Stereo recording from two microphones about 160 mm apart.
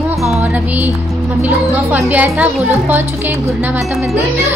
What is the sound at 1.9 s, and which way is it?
Speech, 10° right (ahead or behind).